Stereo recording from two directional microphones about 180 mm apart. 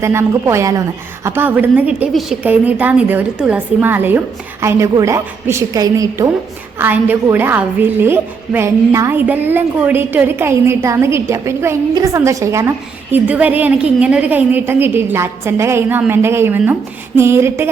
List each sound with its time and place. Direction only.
0.0 s a woman's voice: 15° right (ahead or behind)